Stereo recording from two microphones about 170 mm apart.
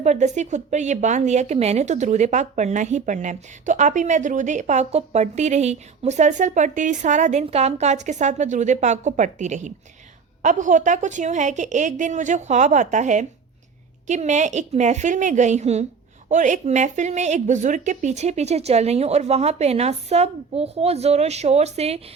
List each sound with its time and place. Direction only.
0.0 s a woman's voice: 45° right (ahead or behind)